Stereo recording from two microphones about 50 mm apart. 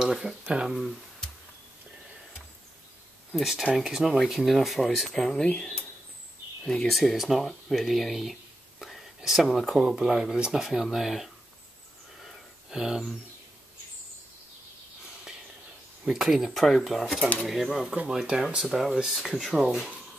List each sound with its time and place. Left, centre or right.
0.0 s speech: centre
3.3 s speech: centre
5.4 s speech: left
6.9 s speech: centre
12.2 s a sound: centre
16.1 s speech: centre
18.0 s speech: centre